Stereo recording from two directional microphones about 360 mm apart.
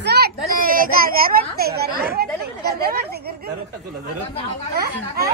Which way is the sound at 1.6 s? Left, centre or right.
Right.